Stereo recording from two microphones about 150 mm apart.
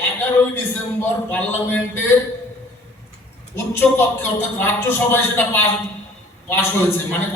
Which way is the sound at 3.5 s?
15° left (ahead or behind).